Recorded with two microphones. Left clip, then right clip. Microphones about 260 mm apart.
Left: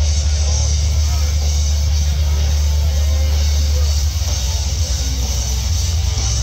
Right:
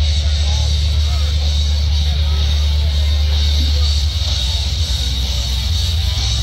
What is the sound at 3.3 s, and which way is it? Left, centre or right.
Vehicle, right.